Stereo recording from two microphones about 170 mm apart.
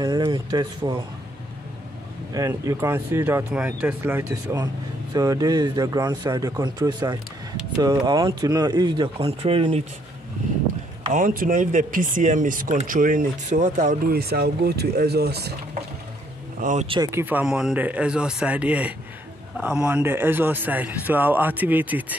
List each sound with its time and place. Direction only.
0.0 s speech: 25° right (ahead or behind)
2.3 s speech: 20° right (ahead or behind); by 9.8 s 35° right (ahead or behind)
11.1 s speech: 50° right (ahead or behind)
14.1 s speech: 70° right (ahead or behind)
16.8 s speech: 30° right (ahead or behind)
17.1 s speech: 10° right (ahead or behind)